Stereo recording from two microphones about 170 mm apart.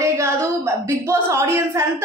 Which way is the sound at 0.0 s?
15° right (ahead or behind).